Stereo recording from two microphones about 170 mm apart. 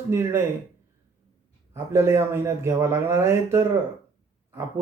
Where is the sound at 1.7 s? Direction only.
15° right (ahead or behind).